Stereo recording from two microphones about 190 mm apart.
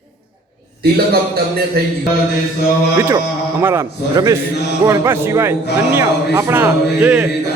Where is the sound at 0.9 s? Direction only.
55° right (ahead or behind).